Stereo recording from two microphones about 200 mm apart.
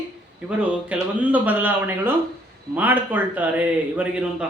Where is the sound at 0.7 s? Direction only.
5° right (ahead or behind).